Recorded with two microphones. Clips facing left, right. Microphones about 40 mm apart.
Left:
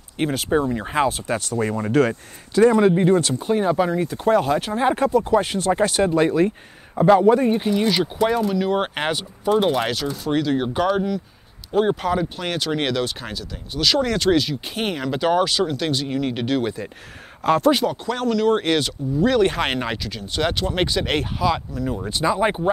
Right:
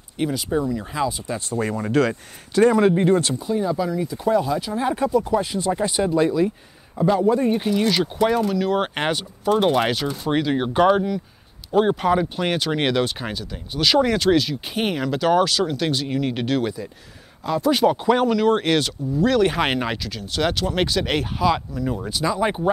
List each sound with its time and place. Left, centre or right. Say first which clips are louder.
0.2 s speech: left 2 dB; left
1.6 s speech: left 1 dB; left
2.7 s speech: left 1 dB; centre
3.3 s speech: left 3 dB; left
4.7 s speech: left 1 dB; left
6.0 s speech: right 1 dB; left
7.3 s speech: left 1 dB; centre
15.1 s speech: even; centre
17.4 s speech: left 5 dB; left
17.8 s speech: right 5 dB; centre
22.1 s speech: left 3 dB; centre